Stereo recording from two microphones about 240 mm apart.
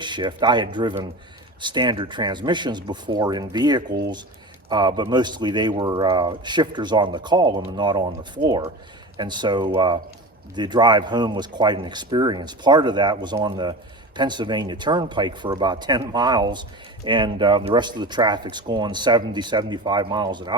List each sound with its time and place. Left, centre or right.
0.0 s speech: centre
3.8 s speech: right
4.7 s speech: centre